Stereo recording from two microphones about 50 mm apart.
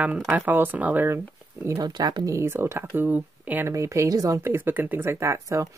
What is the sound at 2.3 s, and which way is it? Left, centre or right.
Speech, right.